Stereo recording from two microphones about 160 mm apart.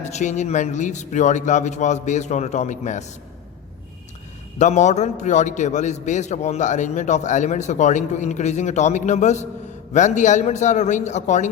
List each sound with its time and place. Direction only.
0.0 s a man's voice: 45° left (ahead or behind)
4.5 s a man's voice: 50° left (ahead or behind)